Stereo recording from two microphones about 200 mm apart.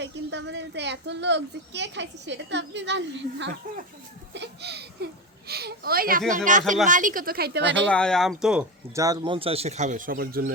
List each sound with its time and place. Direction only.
0.0 s a woman's voice: 60° right (ahead or behind)
7.9 s speech: 5° left (ahead or behind)
9.0 s speech: 20° right (ahead or behind); by 10.5 s 50° right (ahead or behind)